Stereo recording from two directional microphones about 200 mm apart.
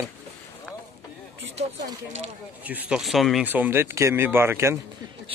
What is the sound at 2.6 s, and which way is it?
Speech, 5° right (ahead or behind).